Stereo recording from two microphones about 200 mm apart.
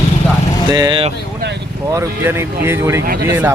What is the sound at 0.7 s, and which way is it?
Speech, 20° right (ahead or behind).